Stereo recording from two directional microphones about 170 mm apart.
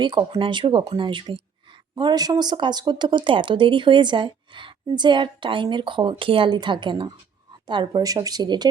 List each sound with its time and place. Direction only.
0.0 s speech: 30° right (ahead or behind)